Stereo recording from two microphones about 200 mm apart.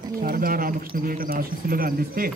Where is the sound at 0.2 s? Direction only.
45° right (ahead or behind).